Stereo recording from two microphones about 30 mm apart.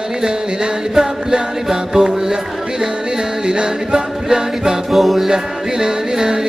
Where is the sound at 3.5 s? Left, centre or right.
Right.